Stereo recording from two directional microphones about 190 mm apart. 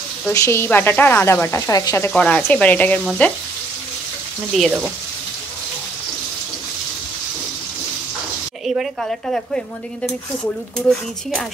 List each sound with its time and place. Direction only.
0.3 s speech: 15° left (ahead or behind)
4.6 s a woman's voice: 5° right (ahead or behind)
8.6 s a woman's voice: centre (ahead or behind)